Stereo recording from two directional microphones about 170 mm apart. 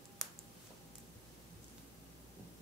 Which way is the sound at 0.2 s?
Centre (ahead or behind).